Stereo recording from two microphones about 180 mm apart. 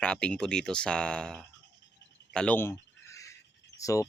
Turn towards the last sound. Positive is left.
turn(degrees=20)  # may be behind; listen again after turning